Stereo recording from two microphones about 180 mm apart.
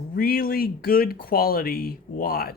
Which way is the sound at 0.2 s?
55° left (ahead or behind).